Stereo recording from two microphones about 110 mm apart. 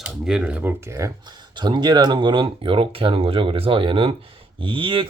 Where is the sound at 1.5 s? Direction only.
40° right (ahead or behind).